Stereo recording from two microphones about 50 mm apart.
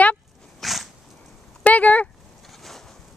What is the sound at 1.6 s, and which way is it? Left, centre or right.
Speech, left.